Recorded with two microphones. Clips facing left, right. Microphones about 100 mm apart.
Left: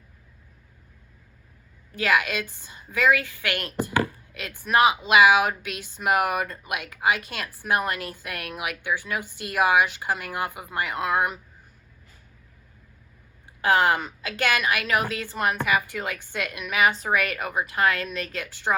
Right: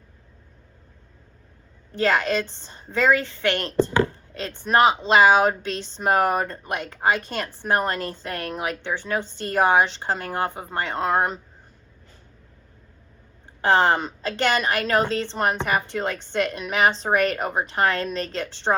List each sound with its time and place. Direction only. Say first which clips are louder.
2.2 s a woman's voice: right 6 dB; 30° right (ahead or behind)
2.6 s a woman's voice: right 2 dB; 10° left (ahead or behind)
2.9 s a woman's voice: right 2 dB; 30° right (ahead or behind)
3.9 s a sound: right 3 dB; 25° right (ahead or behind)
4.6 s a woman's voice: right 2 dB; 30° right (ahead or behind)
13.6 s a woman's voice: right 2 dB; 30° right (ahead or behind)